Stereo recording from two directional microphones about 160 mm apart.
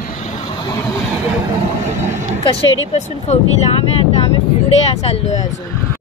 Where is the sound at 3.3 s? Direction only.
45° left (ahead or behind).